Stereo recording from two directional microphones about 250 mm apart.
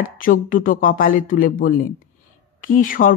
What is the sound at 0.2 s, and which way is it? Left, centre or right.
Speech, left.